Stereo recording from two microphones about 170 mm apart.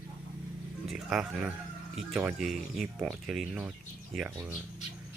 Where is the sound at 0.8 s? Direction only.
Centre (ahead or behind).